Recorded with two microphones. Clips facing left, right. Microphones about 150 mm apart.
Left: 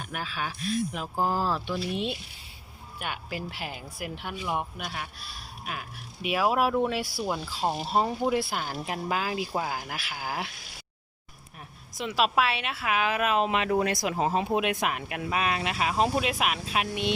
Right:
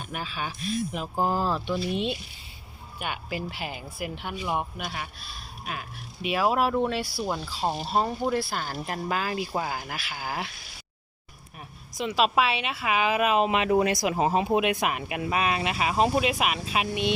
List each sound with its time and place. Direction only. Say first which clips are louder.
0.1 s speech: right 1 dB; centre (ahead or behind)
6.2 s speech: right 1 dB; 5° left (ahead or behind)
8.4 s speech: even; 20° left (ahead or behind)
8.8 s speech: right 1 dB; 5° left (ahead or behind)
11.9 s speech: right 2 dB; centre (ahead or behind)